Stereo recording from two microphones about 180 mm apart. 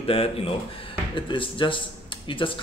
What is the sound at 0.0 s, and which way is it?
Speech, 30° left (ahead or behind).